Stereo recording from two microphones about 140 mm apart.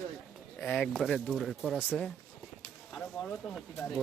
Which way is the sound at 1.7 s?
10° left (ahead or behind).